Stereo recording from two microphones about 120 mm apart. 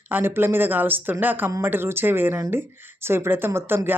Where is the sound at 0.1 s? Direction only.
20° right (ahead or behind).